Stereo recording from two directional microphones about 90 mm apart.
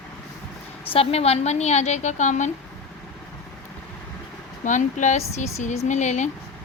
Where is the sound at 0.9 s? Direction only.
90° left.